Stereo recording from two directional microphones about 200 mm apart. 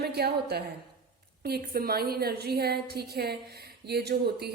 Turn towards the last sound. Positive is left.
turn(degrees=-55)  # may be behind; listen again after turning